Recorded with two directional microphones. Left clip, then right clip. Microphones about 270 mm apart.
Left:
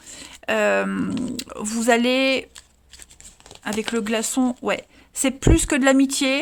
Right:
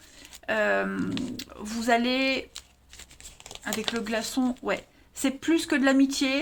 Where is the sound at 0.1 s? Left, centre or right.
Left.